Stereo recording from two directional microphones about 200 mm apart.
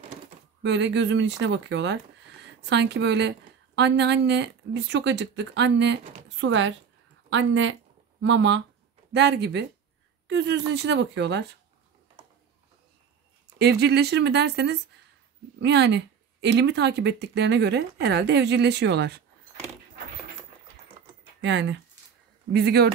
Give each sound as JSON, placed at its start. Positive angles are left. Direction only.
{"t": 0.6, "sound": "a woman's voice", "side_deg": -60}
{"t": 13.6, "sound": "a woman's voice", "side_deg": -55}
{"t": 21.4, "sound": "speech", "side_deg": -65}